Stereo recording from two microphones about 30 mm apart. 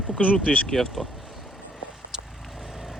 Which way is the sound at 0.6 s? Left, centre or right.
Centre.